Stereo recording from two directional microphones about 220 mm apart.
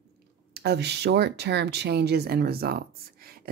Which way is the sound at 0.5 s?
50° right (ahead or behind).